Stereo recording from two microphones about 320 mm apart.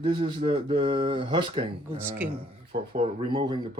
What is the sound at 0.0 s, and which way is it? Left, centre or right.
Speech, centre.